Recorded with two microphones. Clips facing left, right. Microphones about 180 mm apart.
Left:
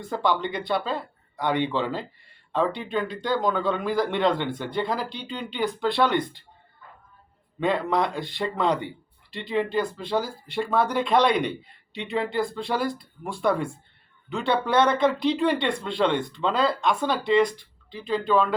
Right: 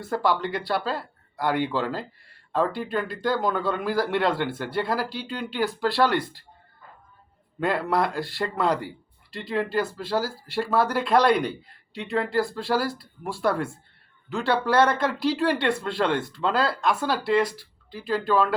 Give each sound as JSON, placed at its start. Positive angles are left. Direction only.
{"t": 0.0, "sound": "speech", "side_deg": -5}
{"t": 7.6, "sound": "speech", "side_deg": -5}